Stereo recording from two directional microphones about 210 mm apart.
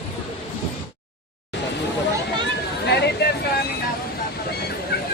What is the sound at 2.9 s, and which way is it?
Chatter, 50° left (ahead or behind).